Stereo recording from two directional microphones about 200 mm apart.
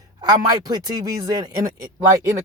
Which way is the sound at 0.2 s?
20° right (ahead or behind).